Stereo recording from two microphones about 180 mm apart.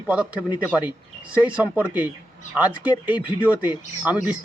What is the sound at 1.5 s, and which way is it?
Speech, 5° right (ahead or behind).